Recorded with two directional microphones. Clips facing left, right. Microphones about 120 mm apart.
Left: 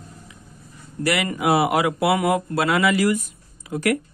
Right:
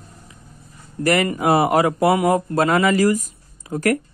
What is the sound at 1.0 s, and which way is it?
Speech, 45° right (ahead or behind).